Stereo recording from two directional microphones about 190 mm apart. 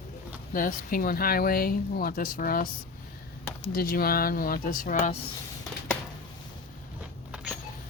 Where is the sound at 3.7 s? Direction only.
50° left (ahead or behind).